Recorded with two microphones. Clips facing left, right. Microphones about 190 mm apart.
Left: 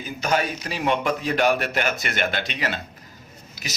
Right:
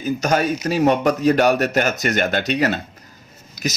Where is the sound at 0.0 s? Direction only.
45° right (ahead or behind).